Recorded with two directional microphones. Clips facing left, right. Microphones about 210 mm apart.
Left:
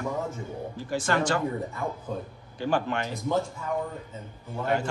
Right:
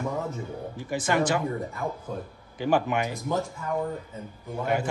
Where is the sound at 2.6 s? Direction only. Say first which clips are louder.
Right 3 dB; 10° right (ahead or behind).